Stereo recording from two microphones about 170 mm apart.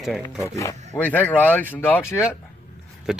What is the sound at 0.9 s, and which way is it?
Speech, 10° left (ahead or behind).